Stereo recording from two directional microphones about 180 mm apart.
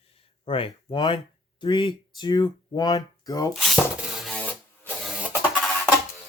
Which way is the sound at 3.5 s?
Centre (ahead or behind).